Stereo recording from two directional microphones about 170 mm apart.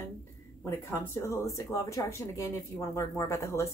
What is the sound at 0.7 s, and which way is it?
Speech, 15° left (ahead or behind).